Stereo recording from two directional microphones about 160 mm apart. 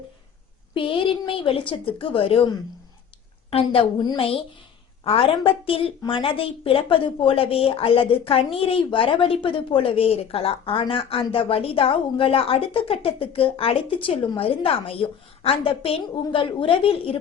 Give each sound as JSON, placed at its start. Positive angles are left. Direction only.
{"t": 0.7, "sound": "speech", "side_deg": 30}